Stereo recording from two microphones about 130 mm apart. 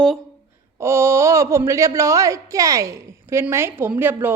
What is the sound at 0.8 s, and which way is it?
A woman's voice, 20° right (ahead or behind).